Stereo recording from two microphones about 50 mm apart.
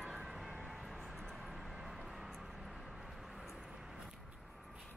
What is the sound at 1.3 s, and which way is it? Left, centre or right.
Vehicle, centre.